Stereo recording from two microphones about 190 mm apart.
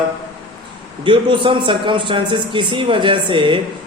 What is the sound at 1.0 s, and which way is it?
A man's voice, 25° right (ahead or behind).